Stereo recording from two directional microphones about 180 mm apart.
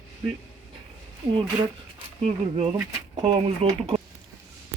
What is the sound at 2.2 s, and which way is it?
Speech, 35° right (ahead or behind).